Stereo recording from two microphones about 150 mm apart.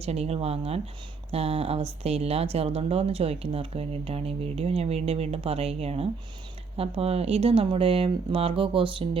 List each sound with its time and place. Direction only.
0.0 s speech: 45° right (ahead or behind)